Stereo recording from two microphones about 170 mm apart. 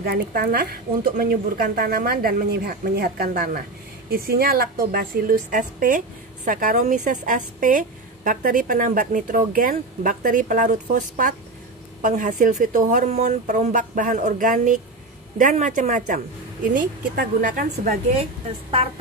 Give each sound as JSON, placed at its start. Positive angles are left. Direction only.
{"t": 0.0, "sound": "a woman's voice", "side_deg": -65}